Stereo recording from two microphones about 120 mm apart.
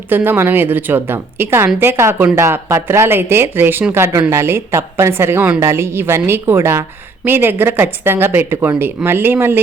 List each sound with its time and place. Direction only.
0.1 s a woman's voice: 15° right (ahead or behind)